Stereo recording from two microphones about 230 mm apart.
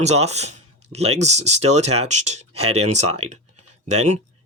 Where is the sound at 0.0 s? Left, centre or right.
Right.